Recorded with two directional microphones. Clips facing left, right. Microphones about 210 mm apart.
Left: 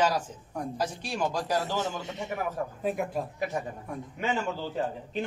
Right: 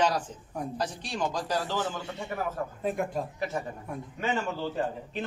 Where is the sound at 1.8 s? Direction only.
20° left (ahead or behind).